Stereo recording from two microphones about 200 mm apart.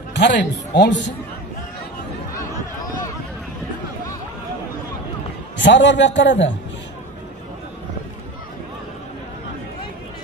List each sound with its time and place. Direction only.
0.1 s a man's voice: 60° left (ahead or behind)
5.6 s a man's voice: 65° left (ahead or behind)